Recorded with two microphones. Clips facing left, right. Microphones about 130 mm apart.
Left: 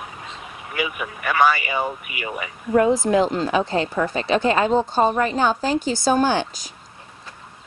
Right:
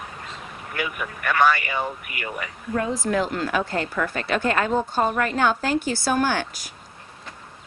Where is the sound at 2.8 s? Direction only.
30° left (ahead or behind).